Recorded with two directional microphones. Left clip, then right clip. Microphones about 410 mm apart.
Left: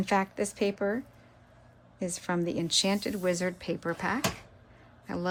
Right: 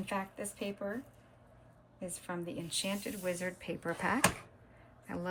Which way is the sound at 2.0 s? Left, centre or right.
Centre.